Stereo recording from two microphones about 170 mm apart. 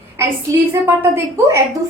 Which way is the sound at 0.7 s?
15° right (ahead or behind).